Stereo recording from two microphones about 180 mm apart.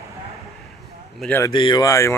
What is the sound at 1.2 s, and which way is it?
Speech, 10° left (ahead or behind).